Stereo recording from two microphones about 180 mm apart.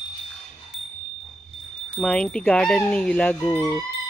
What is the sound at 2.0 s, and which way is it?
Speech, 5° left (ahead or behind).